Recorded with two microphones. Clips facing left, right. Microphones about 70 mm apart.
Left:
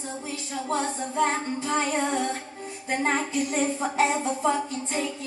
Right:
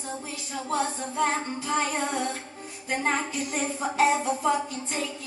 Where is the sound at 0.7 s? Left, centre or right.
Left.